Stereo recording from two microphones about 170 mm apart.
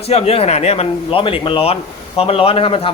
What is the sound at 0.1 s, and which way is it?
Speech, 35° left (ahead or behind).